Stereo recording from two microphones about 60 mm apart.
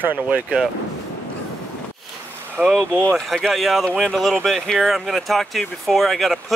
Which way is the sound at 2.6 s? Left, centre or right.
Right.